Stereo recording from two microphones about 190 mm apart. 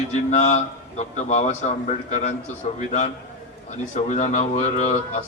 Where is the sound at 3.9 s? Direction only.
40° left (ahead or behind).